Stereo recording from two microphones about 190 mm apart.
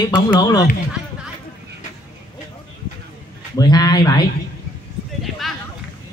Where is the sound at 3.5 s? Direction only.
20° left (ahead or behind).